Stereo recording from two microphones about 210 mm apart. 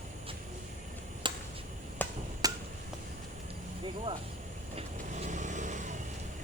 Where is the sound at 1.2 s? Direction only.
20° right (ahead or behind).